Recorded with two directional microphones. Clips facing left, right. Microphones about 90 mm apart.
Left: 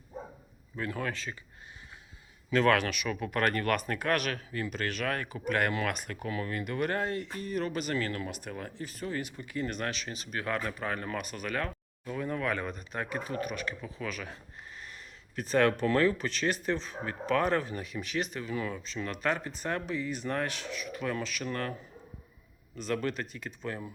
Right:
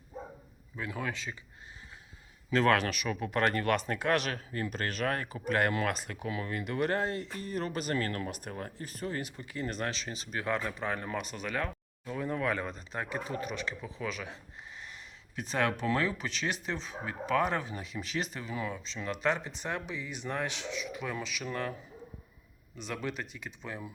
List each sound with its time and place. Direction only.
0.8 s speech: 15° right (ahead or behind)
2.5 s speech: 30° right (ahead or behind)
6.1 s speech: 15° right (ahead or behind)
15.4 s speech: 15° right (ahead or behind)
22.8 s speech: 15° right (ahead or behind)